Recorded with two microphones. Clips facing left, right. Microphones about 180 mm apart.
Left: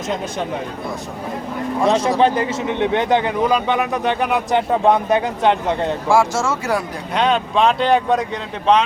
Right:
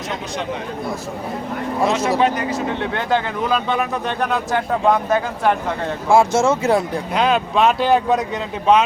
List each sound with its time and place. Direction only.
1.9 s a man's voice: 25° left (ahead or behind)
6.1 s speech: 20° right (ahead or behind)
7.1 s speech: 5° right (ahead or behind)